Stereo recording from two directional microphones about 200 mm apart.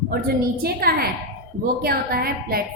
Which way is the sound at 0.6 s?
50° right (ahead or behind).